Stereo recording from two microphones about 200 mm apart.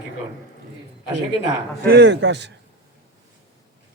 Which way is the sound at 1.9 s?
60° right (ahead or behind).